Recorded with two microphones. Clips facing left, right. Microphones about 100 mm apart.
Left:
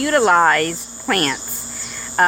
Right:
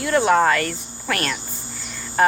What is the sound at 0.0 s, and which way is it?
Speech, 70° left (ahead or behind).